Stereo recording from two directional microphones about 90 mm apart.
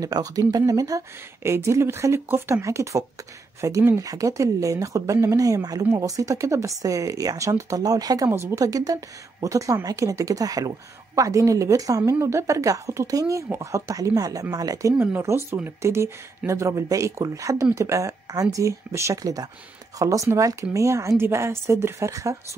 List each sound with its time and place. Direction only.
0.0 s speech: 40° right (ahead or behind)
8.3 s speech: 30° right (ahead or behind)
15.2 s speech: 25° right (ahead or behind)